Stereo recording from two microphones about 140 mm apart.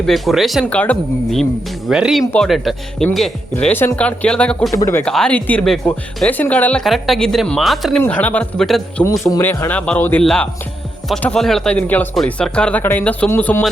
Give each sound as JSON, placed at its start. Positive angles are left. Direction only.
{"t": 0.0, "sound": "a woman's voice", "side_deg": 0}
{"t": 0.6, "sound": "speech", "side_deg": 10}
{"t": 1.9, "sound": "a woman's voice", "side_deg": -5}
{"t": 3.5, "sound": "speech", "side_deg": 15}
{"t": 4.7, "sound": "speech", "side_deg": 20}
{"t": 5.0, "sound": "a woman's voice", "side_deg": 5}
{"t": 8.0, "sound": "speech", "side_deg": 10}
{"t": 9.4, "sound": "speech", "side_deg": 15}